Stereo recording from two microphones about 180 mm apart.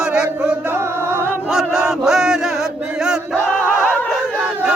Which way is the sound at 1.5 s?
Centre (ahead or behind).